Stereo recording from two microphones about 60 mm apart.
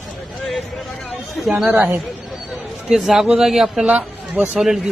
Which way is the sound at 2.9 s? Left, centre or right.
Centre.